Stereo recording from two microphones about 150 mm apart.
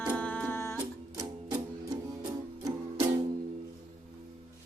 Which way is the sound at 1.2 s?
30° right (ahead or behind).